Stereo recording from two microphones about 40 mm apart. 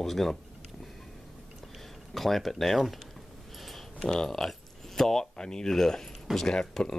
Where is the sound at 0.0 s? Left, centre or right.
Centre.